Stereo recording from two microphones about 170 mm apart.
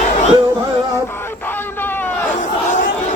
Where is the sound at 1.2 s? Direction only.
10° left (ahead or behind).